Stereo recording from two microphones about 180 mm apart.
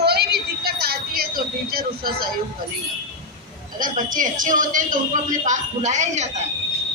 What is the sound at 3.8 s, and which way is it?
Speech, 50° right (ahead or behind).